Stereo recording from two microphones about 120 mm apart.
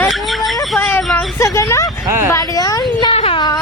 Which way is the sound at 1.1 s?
25° left (ahead or behind).